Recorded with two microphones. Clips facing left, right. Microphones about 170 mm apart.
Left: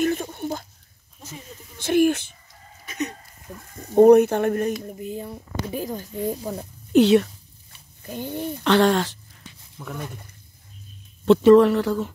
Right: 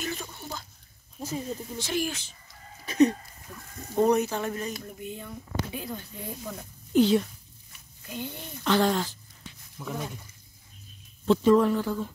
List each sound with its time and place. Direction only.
0.0 s a sound: 55° left (ahead or behind)
1.2 s snake: 35° right (ahead or behind)
1.8 s speech: 55° left (ahead or behind)
2.8 s chicken: 30° right (ahead or behind)
3.5 s a sound: 35° left (ahead or behind)
3.9 s speech: 55° left (ahead or behind)
4.8 s speech: 35° left (ahead or behind)
6.9 s speech: 75° left (ahead or behind)
8.1 s speech: 45° left (ahead or behind)
8.6 s speech: 70° left (ahead or behind)
9.8 s speech: 5° right (ahead or behind)
11.2 s speech: 75° left (ahead or behind)